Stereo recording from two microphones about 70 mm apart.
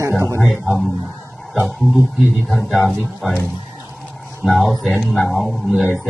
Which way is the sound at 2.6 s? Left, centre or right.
Centre.